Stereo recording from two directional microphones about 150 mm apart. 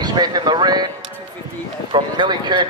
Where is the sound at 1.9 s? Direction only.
30° right (ahead or behind).